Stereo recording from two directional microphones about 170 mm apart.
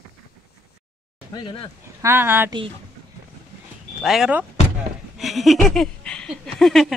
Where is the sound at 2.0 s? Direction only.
15° right (ahead or behind).